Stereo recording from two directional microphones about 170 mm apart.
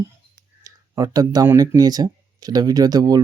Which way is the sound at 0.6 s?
20° right (ahead or behind).